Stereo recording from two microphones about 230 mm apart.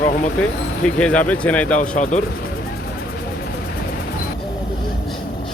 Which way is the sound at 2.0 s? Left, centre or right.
Left.